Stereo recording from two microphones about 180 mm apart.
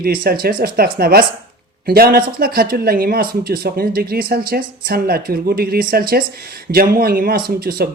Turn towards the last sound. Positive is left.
turn(degrees=-55)  # may be behind; listen again after turning